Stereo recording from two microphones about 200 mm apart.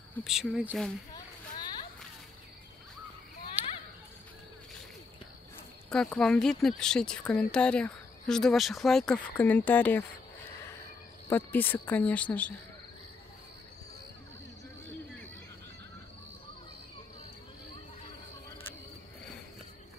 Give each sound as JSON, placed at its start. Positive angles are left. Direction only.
{"t": 0.2, "sound": "speech", "side_deg": 0}
{"t": 1.1, "sound": "a sound", "side_deg": 20}
{"t": 3.6, "sound": "children playing", "side_deg": -10}
{"t": 5.9, "sound": "speech", "side_deg": 5}
{"t": 11.2, "sound": "speech", "side_deg": 10}